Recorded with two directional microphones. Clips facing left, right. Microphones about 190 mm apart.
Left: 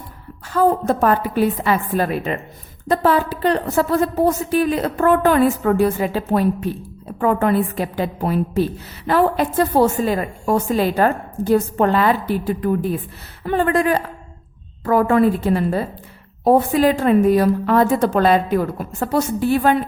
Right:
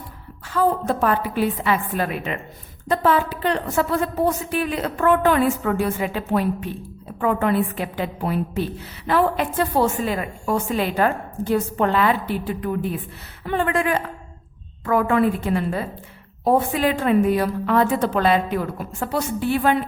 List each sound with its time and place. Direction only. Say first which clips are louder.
0.5 s a woman's voice: left 4 dB; 45° left (ahead or behind)